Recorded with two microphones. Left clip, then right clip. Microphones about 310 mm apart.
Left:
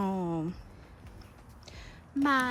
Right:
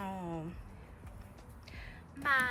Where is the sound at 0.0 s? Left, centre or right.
Centre.